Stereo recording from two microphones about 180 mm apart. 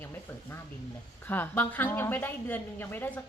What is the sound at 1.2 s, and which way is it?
A woman's voice, 10° left (ahead or behind).